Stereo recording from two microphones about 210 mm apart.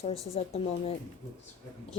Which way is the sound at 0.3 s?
30° left (ahead or behind).